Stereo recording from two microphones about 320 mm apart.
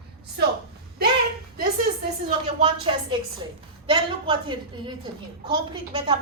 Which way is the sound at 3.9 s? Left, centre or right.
Centre.